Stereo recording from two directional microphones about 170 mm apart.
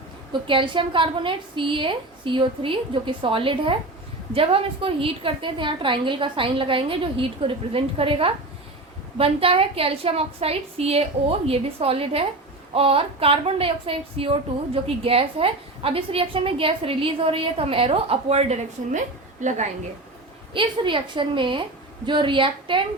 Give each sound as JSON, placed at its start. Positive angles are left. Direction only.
{"t": 0.4, "sound": "a woman's voice", "side_deg": -30}
{"t": 20.5, "sound": "a woman's voice", "side_deg": -30}